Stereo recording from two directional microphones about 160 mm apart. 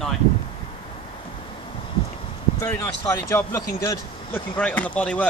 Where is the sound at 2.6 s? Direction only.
15° left (ahead or behind).